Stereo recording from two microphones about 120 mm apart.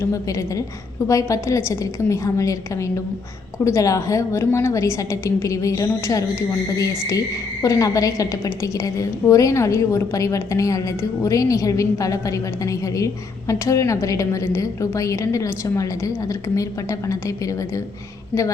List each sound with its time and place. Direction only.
0.0 s a woman's voice: 25° left (ahead or behind)
7.6 s a woman's voice: 30° left (ahead or behind)